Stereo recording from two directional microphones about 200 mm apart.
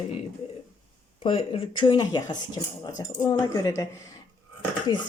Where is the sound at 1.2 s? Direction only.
30° left (ahead or behind).